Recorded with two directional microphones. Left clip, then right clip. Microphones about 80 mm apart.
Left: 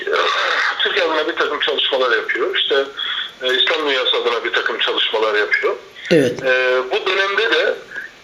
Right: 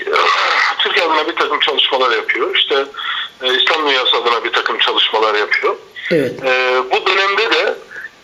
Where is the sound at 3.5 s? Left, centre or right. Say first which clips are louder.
Right 3 dB; right.